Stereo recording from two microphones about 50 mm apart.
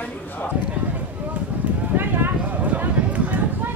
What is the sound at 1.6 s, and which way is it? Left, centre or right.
Clip-clop, right.